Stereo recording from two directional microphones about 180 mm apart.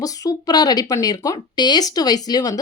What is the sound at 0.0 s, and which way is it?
Speech, 20° left (ahead or behind).